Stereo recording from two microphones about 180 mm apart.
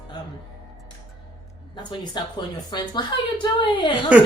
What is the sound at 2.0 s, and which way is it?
A woman's voice, 25° left (ahead or behind).